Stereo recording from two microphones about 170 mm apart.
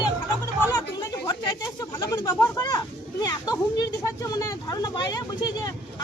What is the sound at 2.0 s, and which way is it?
Speech, 20° left (ahead or behind).